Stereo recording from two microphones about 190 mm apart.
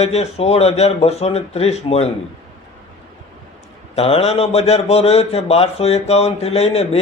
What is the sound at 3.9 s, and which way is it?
Speech, 35° left (ahead or behind).